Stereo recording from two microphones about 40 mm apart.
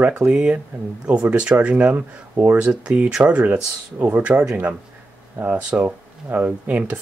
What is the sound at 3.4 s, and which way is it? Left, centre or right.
Speech, right.